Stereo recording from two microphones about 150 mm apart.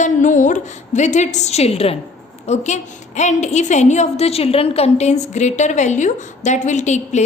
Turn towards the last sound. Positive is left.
turn(degrees=50)  # may be behind; listen again after turning